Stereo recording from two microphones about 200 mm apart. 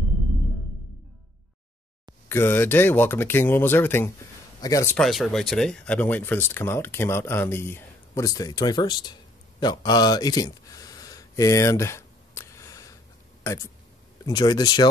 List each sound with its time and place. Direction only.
2.2 s a man's voice: 10° left (ahead or behind)
4.9 s speech: centre (ahead or behind); by 9.1 s 20° left (ahead or behind)
9.6 s a sound: 20° left (ahead or behind)
14.2 s speech: 20° left (ahead or behind)